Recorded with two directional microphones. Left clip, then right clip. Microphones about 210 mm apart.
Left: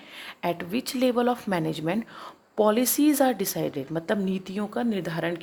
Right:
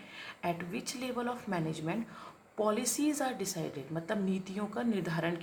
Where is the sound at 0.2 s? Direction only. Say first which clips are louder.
Left 7 dB; 40° left (ahead or behind).